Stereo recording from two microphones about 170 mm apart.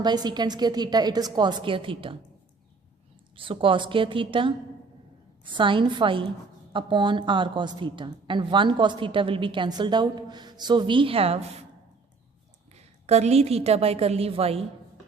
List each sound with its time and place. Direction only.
0.0 s a woman's voice: 25° right (ahead or behind)
3.3 s a woman's voice: 30° right (ahead or behind)
5.5 s a woman's voice: 30° right (ahead or behind)
12.7 s a woman's voice: 40° right (ahead or behind)